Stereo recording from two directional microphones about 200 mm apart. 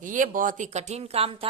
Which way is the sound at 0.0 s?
40° right (ahead or behind).